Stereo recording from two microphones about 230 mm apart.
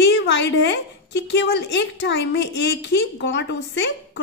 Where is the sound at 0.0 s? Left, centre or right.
Left.